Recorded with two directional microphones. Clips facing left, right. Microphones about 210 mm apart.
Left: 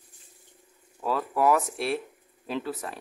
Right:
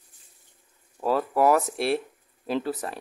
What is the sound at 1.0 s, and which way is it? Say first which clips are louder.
Speech: right 4 dB; 40° right (ahead or behind).